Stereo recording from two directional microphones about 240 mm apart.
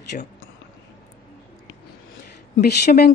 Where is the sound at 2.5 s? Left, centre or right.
Left.